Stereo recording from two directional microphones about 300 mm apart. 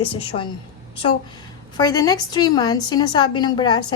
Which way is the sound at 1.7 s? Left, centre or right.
Centre.